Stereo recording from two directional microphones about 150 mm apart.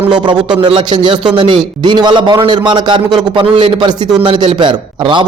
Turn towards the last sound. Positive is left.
turn(degrees=-30)  # may be behind; listen again after turning